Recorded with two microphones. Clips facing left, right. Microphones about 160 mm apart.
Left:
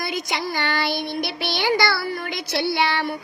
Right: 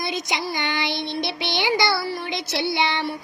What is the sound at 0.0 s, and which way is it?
Child singing, 20° right (ahead or behind).